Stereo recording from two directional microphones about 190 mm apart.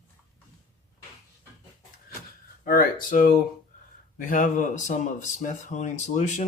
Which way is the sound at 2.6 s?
50° left (ahead or behind).